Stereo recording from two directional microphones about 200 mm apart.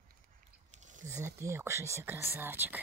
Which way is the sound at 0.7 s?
35° right (ahead or behind).